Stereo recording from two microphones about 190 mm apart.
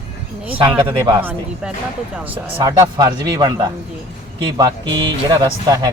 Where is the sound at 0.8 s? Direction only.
25° right (ahead or behind).